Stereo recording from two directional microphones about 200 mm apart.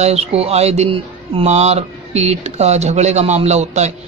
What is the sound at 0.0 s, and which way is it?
Speech, 30° right (ahead or behind).